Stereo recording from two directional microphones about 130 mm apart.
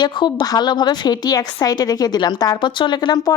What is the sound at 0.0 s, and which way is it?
A woman's voice, 35° left (ahead or behind).